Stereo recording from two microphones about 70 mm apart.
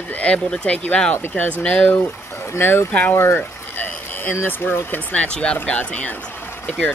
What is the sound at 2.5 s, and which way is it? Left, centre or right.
Speech, left.